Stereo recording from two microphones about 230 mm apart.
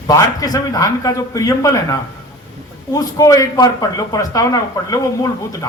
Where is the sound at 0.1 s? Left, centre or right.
Centre.